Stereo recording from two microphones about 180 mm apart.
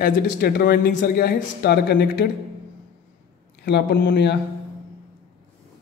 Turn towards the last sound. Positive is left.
turn(degrees=70)  # may be behind; listen again after turning